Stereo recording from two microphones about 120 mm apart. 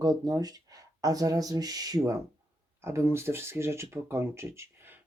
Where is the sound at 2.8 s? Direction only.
20° right (ahead or behind).